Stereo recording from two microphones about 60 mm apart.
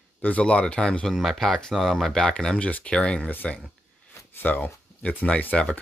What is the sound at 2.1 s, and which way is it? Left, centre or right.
Speech, centre.